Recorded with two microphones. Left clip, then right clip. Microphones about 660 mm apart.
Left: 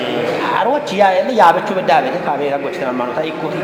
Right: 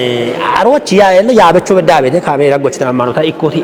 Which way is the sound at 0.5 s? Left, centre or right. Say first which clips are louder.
Right 10 dB; right.